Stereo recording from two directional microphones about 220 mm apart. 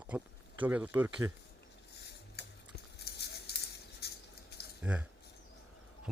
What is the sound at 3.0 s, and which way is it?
Patter, 50° left (ahead or behind).